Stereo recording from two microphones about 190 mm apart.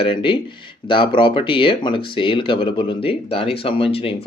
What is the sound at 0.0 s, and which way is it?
Speech, 30° left (ahead or behind).